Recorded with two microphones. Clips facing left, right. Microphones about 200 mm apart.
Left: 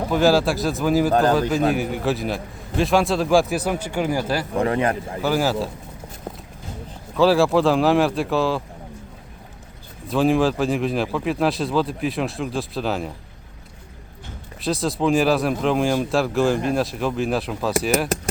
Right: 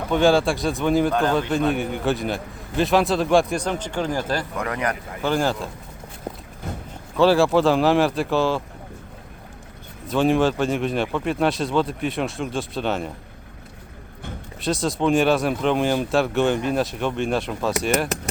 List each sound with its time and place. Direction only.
0.1 s speech: centre (ahead or behind)
4.5 s speech: 30° left (ahead or behind)
5.2 s speech: 5° left (ahead or behind)
7.2 s speech: centre (ahead or behind)
10.1 s speech: centre (ahead or behind)
14.6 s speech: centre (ahead or behind)